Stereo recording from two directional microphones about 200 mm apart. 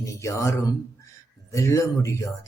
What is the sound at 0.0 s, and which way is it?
Speech, 15° left (ahead or behind).